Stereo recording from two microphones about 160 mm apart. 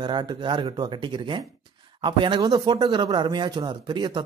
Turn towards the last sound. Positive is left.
turn(degrees=-30)  # may be behind; listen again after turning